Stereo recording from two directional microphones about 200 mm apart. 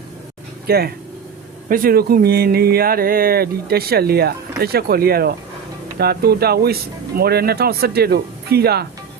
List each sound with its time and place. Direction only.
0.7 s speech: 50° right (ahead or behind)